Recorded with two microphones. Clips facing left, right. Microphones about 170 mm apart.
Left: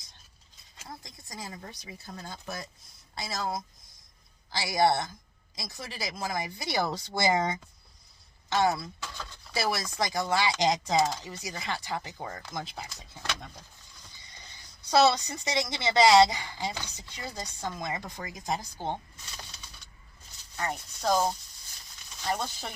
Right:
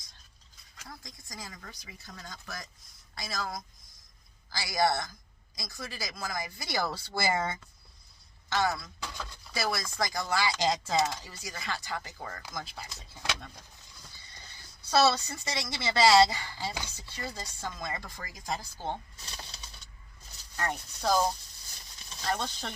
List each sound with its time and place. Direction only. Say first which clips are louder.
0.8 s speech: left 3 dB; 25° left (ahead or behind)
14.8 s speech: left 2 dB; 15° left (ahead or behind)
16.8 s chopping: right 1 dB; 15° left (ahead or behind)
20.6 s speech: even; centre (ahead or behind)
22.3 s chopping: left 1 dB; 5° left (ahead or behind)